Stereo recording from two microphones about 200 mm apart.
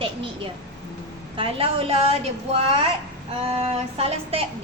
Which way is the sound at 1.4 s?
30° right (ahead or behind).